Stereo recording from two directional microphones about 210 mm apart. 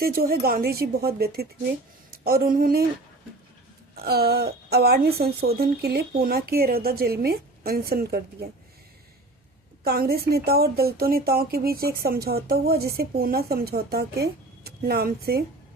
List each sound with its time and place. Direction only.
0.0 s a woman's voice: 45° right (ahead or behind)
3.9 s a woman's voice: 50° right (ahead or behind)
9.8 s a woman's voice: 45° right (ahead or behind)